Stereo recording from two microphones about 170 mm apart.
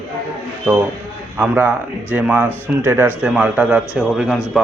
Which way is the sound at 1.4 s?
10° right (ahead or behind).